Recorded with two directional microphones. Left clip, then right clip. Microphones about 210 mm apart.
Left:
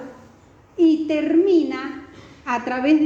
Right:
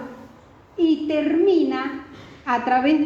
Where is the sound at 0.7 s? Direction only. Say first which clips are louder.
Left 2 dB; 50° left (ahead or behind).